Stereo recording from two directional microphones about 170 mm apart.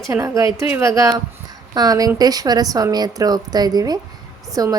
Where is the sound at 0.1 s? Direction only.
20° right (ahead or behind).